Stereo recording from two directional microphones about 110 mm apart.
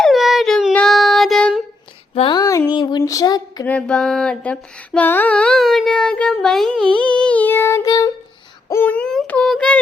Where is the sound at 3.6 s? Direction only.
10° left (ahead or behind).